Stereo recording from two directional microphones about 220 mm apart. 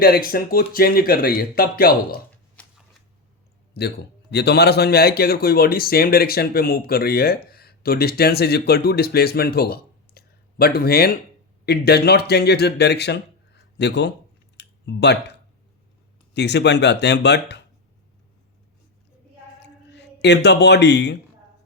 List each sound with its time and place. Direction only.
0.0 s a man's voice: 45° left (ahead or behind)
2.6 s shuffling cards: 5° left (ahead or behind)
3.8 s a man's voice: 50° left (ahead or behind)
14.5 s a sound: 50° left (ahead or behind)
16.3 s a man's voice: 50° left (ahead or behind)
19.5 s a sound: 50° left (ahead or behind)